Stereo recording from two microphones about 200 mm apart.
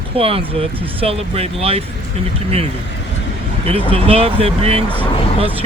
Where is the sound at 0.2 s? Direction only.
30° right (ahead or behind).